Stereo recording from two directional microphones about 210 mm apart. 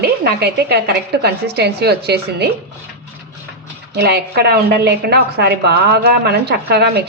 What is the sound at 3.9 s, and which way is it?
A woman's voice, 50° right (ahead or behind).